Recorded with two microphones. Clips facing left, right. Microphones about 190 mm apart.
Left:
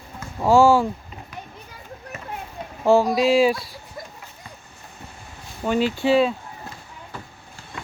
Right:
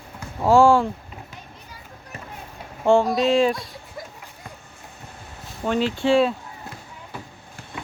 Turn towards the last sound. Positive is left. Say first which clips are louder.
# even
turn(degrees=5)  # may be behind; listen again after turning